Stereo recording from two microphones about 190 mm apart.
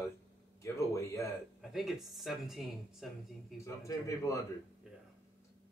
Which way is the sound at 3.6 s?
15° left (ahead or behind).